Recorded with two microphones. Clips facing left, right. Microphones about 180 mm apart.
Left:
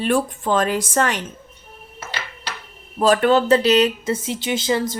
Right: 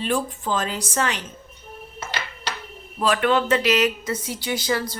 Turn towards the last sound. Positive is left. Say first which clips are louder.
# left 4 dB
turn(degrees=25)  # may be behind; listen again after turning